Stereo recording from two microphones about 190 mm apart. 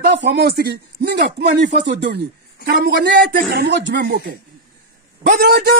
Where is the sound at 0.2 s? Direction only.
60° right (ahead or behind).